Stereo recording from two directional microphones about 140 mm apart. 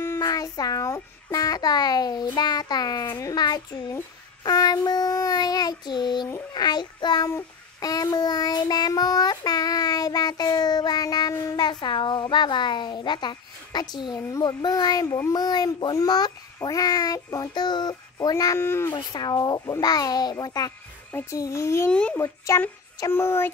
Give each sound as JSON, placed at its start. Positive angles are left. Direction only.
{"t": 0.0, "sound": "a child's voice", "side_deg": 20}
{"t": 6.5, "sound": "child singing", "side_deg": 30}
{"t": 18.9, "sound": "a child's voice", "side_deg": 30}
{"t": 21.1, "sound": "a child's voice", "side_deg": 15}
{"t": 21.9, "sound": "speech", "side_deg": 10}
{"t": 22.5, "sound": "a child's voice", "side_deg": 25}